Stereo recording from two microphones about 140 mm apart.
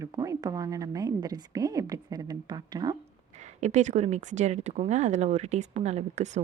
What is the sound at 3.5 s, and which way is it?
Speech, 55° right (ahead or behind).